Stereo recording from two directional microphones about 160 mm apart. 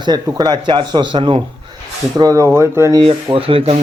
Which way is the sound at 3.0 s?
35° right (ahead or behind).